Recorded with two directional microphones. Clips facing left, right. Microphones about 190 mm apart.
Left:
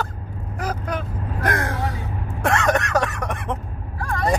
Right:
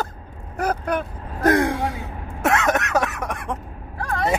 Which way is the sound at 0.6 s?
55° right (ahead or behind).